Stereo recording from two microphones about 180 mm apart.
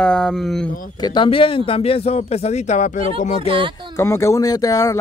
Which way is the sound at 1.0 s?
25° left (ahead or behind).